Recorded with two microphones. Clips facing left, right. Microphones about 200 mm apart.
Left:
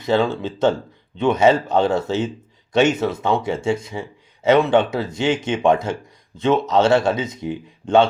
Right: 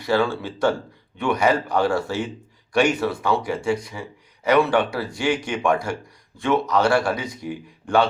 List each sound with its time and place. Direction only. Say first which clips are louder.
0.0 s speech: left 2 dB; 20° left (ahead or behind)